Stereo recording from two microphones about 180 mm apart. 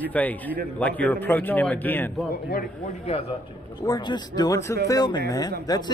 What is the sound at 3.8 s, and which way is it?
Speech, 20° left (ahead or behind).